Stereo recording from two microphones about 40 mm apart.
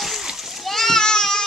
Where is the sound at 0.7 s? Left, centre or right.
Centre.